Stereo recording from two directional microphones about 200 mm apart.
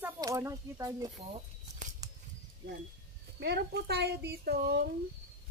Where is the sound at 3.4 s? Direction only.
55° right (ahead or behind).